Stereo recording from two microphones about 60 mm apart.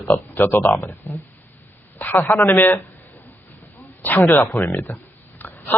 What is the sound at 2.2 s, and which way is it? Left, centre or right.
Speech, left.